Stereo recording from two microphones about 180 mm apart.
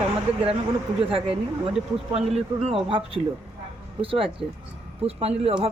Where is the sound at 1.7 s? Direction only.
35° right (ahead or behind).